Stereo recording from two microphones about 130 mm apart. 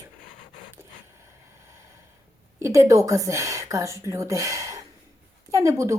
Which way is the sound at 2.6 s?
25° right (ahead or behind).